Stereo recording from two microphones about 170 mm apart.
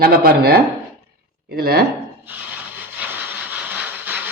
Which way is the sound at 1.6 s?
65° right (ahead or behind).